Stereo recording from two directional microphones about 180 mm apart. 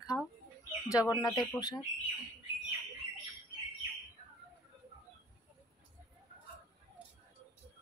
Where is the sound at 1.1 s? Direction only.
20° left (ahead or behind).